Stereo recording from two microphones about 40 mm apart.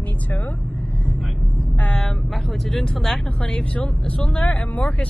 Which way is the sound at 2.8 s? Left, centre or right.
Centre.